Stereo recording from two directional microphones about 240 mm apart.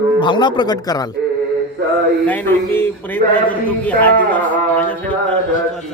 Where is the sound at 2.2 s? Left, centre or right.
Centre.